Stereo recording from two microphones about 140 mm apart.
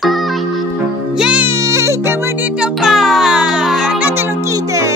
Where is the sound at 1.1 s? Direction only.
5° right (ahead or behind).